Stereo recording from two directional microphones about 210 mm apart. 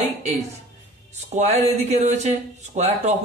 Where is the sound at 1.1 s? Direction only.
30° right (ahead or behind).